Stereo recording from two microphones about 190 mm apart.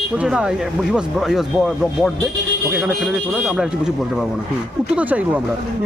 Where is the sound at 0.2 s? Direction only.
5° right (ahead or behind).